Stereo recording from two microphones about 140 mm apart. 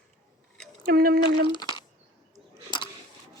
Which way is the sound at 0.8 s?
90° right.